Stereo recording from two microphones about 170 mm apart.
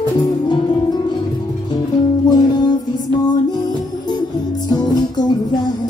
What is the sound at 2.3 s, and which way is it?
Music, 25° left (ahead or behind).